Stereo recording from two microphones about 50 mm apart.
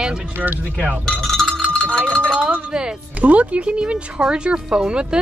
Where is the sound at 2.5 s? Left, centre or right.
Right.